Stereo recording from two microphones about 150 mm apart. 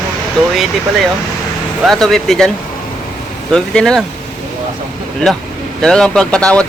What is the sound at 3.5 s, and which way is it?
Speech, 5° left (ahead or behind).